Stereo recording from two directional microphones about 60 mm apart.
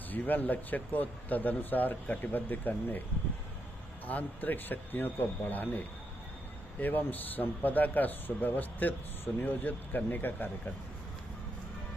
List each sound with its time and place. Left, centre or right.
0.1 s speech: left
4.0 s a man's voice: left